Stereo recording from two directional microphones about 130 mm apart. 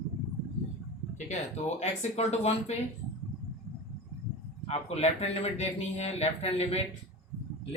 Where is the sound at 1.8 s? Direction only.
55° left (ahead or behind).